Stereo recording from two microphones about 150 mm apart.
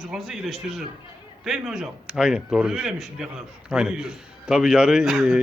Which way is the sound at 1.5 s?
5° right (ahead or behind).